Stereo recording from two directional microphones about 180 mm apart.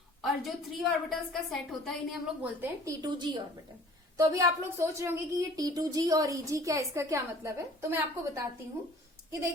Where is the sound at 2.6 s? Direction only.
20° right (ahead or behind).